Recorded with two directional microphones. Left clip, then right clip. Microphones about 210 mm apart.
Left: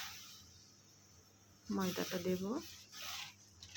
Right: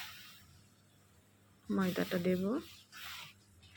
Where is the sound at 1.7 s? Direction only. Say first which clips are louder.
Right 4 dB; 15° right (ahead or behind).